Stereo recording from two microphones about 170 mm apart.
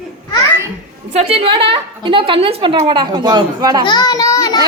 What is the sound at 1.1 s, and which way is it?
A woman's voice, 35° right (ahead or behind).